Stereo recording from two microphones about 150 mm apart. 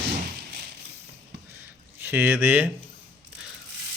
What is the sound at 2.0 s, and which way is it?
Speech, 15° right (ahead or behind).